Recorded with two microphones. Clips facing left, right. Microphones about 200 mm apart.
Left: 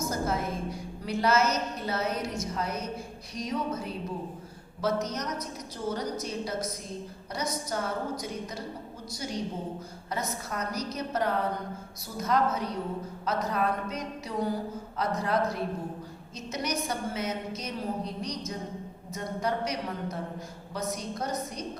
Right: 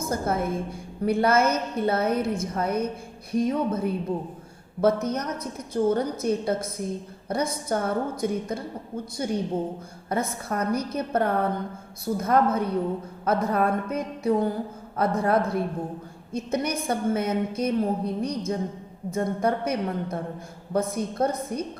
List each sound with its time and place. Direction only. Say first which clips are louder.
0.0 s a woman's voice: right 4 dB; 55° right (ahead or behind)